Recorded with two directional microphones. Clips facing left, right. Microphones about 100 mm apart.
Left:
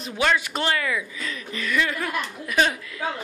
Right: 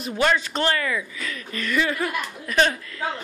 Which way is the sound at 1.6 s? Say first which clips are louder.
Right 2 dB; centre (ahead or behind).